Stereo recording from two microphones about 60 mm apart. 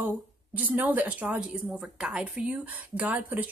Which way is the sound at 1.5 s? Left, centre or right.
Centre.